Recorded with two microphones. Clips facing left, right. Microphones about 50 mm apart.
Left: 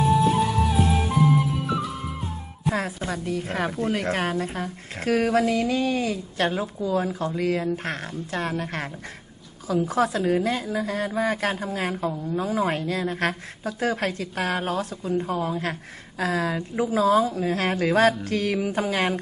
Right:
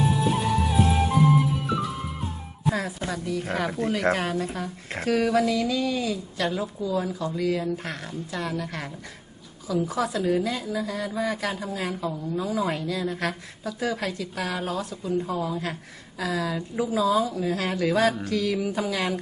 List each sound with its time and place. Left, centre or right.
0.0 s music: centre
3.1 s a woman's voice: left
9.9 s a woman's voice: left